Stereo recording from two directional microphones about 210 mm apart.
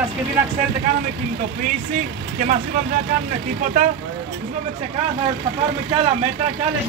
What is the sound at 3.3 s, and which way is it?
Speech, 40° right (ahead or behind).